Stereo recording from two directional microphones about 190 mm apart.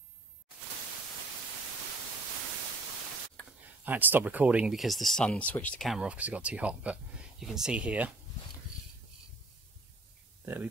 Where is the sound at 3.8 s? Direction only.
10° right (ahead or behind).